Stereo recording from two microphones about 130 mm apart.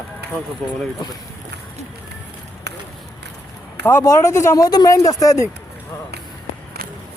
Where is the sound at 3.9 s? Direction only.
20° left (ahead or behind).